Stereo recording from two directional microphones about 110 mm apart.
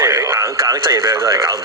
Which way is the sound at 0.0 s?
25° right (ahead or behind).